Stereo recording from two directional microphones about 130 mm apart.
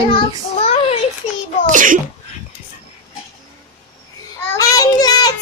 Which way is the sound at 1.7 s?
90° right.